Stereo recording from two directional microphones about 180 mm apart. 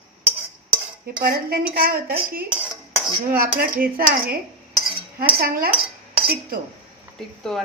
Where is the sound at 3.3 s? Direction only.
55° right (ahead or behind).